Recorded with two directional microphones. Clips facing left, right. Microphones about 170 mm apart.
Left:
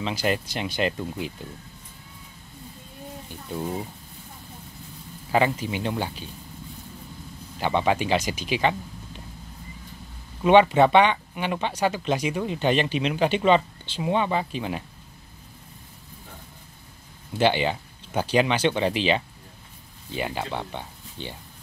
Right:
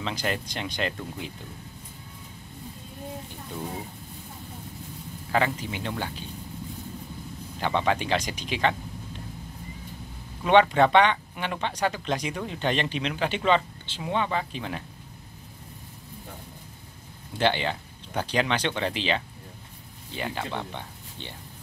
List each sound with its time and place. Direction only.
0.0 s speech: 10° left (ahead or behind)
5.3 s speech: 15° left (ahead or behind)
7.6 s speech: 10° left (ahead or behind)
10.4 s speech: 10° left (ahead or behind)
17.4 s speech: 10° left (ahead or behind)